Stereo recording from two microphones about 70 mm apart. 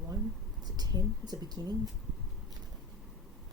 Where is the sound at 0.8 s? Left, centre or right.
Right.